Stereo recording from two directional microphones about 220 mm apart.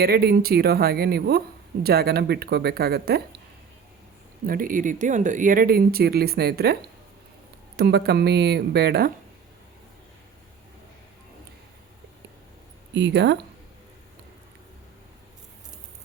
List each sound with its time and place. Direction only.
0.0 s speech: 45° right (ahead or behind)
4.4 s speech: 40° right (ahead or behind)
7.8 s speech: 45° right (ahead or behind)
12.9 s speech: 55° right (ahead or behind)